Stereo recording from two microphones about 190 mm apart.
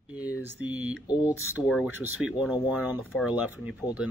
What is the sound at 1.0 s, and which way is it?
Speech, 20° left (ahead or behind).